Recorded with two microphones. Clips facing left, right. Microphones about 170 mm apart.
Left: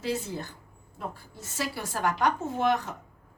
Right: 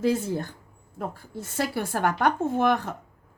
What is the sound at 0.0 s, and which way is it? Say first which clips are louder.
A woman's voice: right 7 dB; 50° right (ahead or behind).